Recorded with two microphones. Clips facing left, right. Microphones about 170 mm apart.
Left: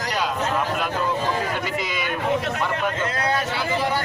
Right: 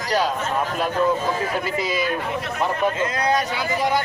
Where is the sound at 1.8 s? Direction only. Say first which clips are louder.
Right 4 dB; 35° right (ahead or behind).